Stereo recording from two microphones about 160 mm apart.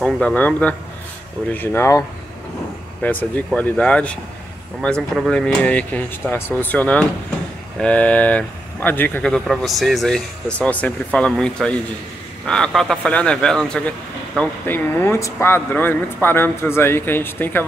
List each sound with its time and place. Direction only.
0.0 s speech: 10° left (ahead or behind)